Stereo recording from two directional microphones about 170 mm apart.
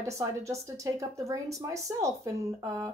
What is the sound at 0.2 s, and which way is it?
Speech, 20° right (ahead or behind).